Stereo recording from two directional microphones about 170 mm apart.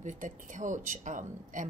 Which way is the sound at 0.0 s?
50° right (ahead or behind).